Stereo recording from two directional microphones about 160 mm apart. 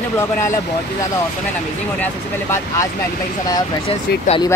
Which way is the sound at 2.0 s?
15° left (ahead or behind).